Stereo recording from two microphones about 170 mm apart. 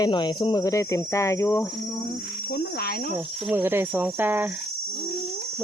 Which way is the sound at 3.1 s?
10° right (ahead or behind).